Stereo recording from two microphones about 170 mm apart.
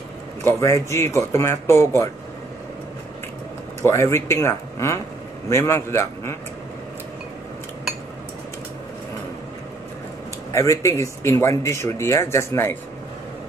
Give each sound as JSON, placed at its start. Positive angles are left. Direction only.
{"t": 0.4, "sound": "speech", "side_deg": 15}
{"t": 3.8, "sound": "speech", "side_deg": 15}
{"t": 10.5, "sound": "speech", "side_deg": 20}